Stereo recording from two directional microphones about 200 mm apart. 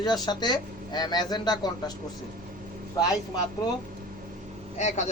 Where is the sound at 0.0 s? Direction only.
20° left (ahead or behind).